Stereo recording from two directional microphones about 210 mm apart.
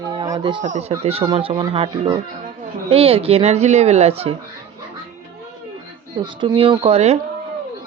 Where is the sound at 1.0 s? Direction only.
25° right (ahead or behind).